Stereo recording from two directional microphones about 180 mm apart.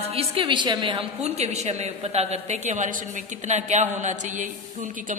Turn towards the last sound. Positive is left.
turn(degrees=-45)  # may be behind; listen again after turning